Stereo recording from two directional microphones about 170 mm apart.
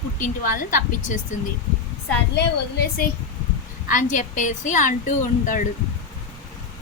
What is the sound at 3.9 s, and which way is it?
A woman's voice, 45° left (ahead or behind).